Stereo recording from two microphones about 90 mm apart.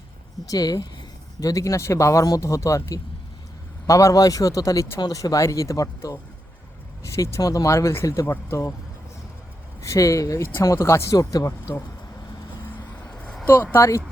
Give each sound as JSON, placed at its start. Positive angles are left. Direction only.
{"t": 0.4, "sound": "speech", "side_deg": 45}
{"t": 9.8, "sound": "speech", "side_deg": 35}
{"t": 13.1, "sound": "a sound", "side_deg": 10}
{"t": 13.7, "sound": "speech", "side_deg": 35}